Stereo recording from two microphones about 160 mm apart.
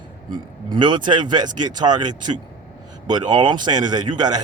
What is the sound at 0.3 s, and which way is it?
Speech, 30° right (ahead or behind).